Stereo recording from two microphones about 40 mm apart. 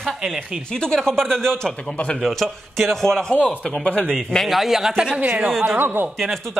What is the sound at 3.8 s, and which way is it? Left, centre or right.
Speech, left.